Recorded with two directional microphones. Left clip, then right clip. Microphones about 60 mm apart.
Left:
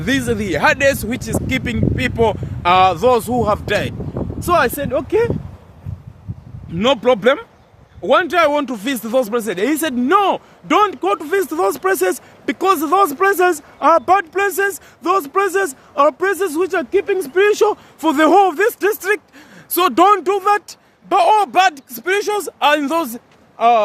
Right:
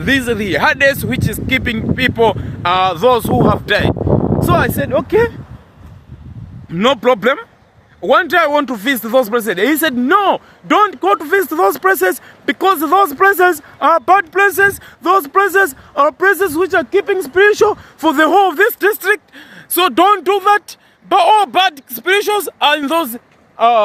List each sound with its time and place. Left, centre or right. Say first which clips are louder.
0.0 s speech: right 5 dB; centre
0.3 s speech: right 2 dB; right
5.0 s speech: right 3 dB; right
6.7 s speech: right 2 dB; right
12.1 s speech: right 4 dB; right
16.9 s speech: right 2 dB; right
18.8 s speech: right 4 dB; right
19.7 s speech: right 1 dB; centre
20.2 s speech: right 4 dB; right
22.8 s a man's voice: right 3 dB; centre